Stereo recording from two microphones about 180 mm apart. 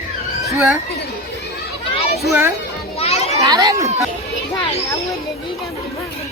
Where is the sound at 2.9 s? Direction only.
35° left (ahead or behind).